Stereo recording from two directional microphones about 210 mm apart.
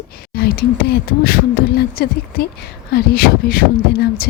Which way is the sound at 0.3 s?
45° left (ahead or behind).